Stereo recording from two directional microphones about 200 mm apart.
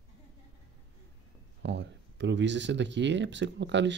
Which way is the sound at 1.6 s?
60° right (ahead or behind).